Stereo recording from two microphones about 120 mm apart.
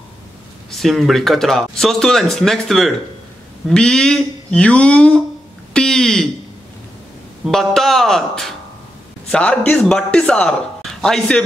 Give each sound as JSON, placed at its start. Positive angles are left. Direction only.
{"t": 0.7, "sound": "speech", "side_deg": 0}
{"t": 5.7, "sound": "a sound", "side_deg": 5}
{"t": 7.4, "sound": "speech", "side_deg": 5}